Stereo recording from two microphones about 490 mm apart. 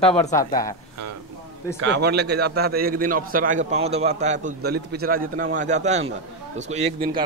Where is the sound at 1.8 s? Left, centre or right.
Right.